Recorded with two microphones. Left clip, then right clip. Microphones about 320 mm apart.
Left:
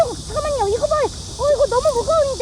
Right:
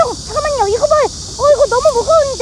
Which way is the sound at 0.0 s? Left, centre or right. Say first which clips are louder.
Right 5 dB; centre.